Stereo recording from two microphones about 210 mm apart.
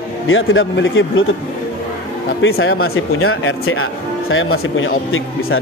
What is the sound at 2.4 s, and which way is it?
A man's voice, 75° left (ahead or behind).